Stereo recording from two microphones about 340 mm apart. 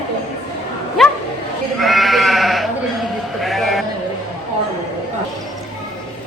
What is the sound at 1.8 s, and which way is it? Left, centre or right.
Sheep, centre.